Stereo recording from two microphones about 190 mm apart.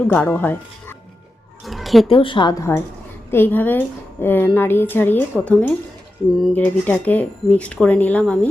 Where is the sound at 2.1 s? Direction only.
25° left (ahead or behind).